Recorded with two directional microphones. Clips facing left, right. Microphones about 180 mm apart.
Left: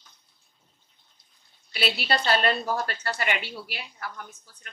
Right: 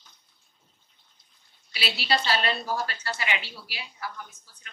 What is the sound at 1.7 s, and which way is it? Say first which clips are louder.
A woman's voice: left 1 dB; 55° left (ahead or behind).